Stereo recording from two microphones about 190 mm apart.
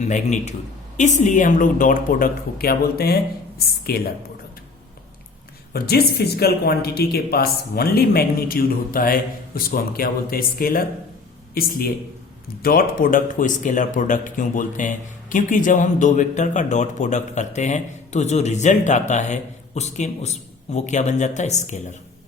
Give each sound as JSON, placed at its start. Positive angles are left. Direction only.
{"t": 0.0, "sound": "a woman's voice", "side_deg": 40}
{"t": 5.7, "sound": "a woman's voice", "side_deg": 55}